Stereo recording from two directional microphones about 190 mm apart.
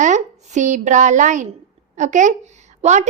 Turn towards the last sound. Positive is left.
turn(degrees=-35)  # may be behind; listen again after turning